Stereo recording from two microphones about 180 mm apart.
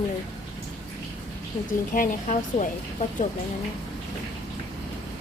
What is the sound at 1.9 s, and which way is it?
Speech, 50° left (ahead or behind).